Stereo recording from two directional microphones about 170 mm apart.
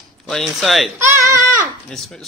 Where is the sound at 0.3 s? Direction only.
Centre (ahead or behind).